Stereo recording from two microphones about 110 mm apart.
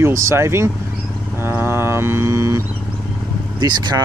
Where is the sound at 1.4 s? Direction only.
20° right (ahead or behind).